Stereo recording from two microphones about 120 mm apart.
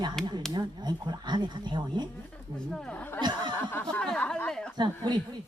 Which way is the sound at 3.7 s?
15° left (ahead or behind).